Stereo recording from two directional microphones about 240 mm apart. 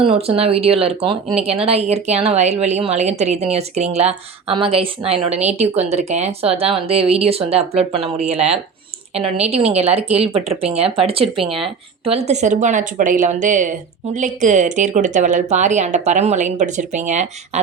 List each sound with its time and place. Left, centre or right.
0.0 s a woman's voice: right